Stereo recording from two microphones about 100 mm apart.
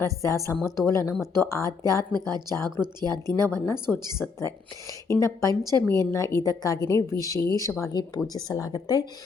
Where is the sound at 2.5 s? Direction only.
30° left (ahead or behind).